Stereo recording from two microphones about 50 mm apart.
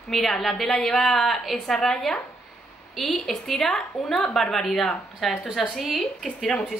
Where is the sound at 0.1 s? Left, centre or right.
Centre.